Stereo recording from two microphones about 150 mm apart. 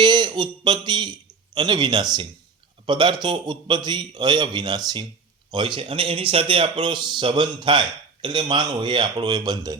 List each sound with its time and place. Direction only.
0.0 s a man's voice: 30° right (ahead or behind)